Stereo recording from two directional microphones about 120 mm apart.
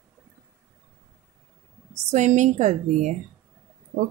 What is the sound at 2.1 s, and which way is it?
A woman's voice, 75° right (ahead or behind).